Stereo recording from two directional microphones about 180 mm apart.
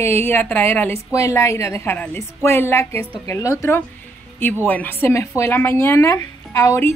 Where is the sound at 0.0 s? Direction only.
15° left (ahead or behind).